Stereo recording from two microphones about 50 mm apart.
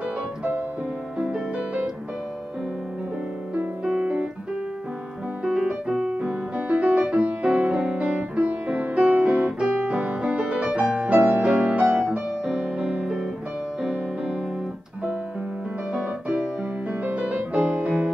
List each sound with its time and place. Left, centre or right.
3.5 s music: right
5.4 s piano: centre
8.4 s music: right
11.1 s music: right
11.4 s music: right
16.0 s piano: right
17.0 s music: right